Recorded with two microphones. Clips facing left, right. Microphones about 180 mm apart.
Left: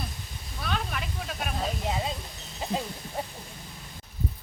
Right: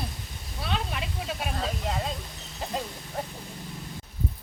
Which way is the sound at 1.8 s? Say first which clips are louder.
Left 1 dB; 5° left (ahead or behind).